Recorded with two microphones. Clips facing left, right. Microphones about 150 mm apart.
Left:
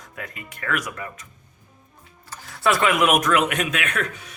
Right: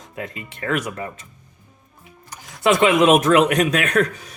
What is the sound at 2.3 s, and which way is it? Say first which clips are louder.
Speech: right 4 dB; 20° right (ahead or behind).